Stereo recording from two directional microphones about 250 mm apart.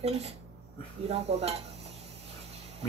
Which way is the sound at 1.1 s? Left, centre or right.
Right.